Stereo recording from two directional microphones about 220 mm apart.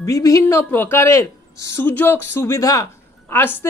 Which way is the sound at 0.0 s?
15° left (ahead or behind).